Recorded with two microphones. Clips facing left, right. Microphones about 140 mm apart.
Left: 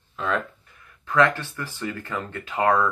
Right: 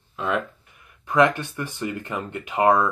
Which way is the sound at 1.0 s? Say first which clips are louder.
Right 2 dB; 15° right (ahead or behind).